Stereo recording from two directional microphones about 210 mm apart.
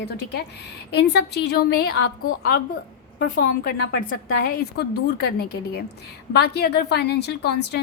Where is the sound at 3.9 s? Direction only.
45° left (ahead or behind).